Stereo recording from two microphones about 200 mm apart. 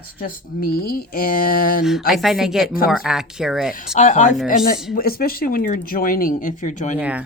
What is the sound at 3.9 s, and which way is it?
Speech, 35° left (ahead or behind).